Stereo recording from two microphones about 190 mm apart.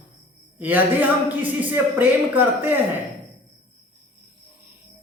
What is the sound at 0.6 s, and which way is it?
Speech, 10° right (ahead or behind).